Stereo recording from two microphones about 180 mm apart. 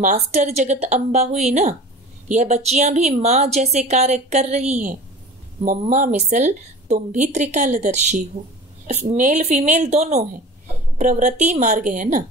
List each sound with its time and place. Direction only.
0.0 s a woman's voice: 40° right (ahead or behind)